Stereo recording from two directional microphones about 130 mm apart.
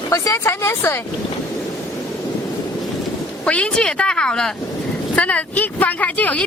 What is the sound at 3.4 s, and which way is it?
Speech, 10° left (ahead or behind).